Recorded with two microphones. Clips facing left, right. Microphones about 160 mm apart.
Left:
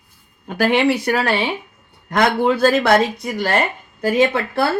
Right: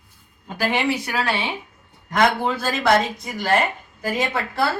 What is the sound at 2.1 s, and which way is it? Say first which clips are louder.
Speech: left 3 dB; 65° left (ahead or behind).